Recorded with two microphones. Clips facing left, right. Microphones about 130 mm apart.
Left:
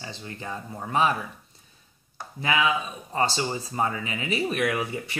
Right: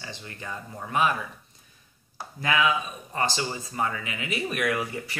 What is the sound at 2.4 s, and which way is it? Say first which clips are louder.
Speech: even; 25° left (ahead or behind).